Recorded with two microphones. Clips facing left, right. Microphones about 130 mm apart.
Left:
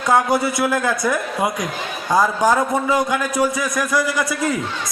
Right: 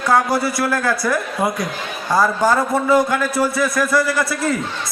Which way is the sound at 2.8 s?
15° left (ahead or behind).